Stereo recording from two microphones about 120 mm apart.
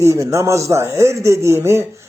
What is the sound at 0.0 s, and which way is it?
Speech, 25° right (ahead or behind).